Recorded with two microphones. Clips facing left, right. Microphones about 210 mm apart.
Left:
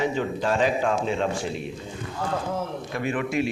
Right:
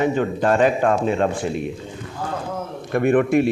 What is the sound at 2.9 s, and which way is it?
Speech, 55° right (ahead or behind).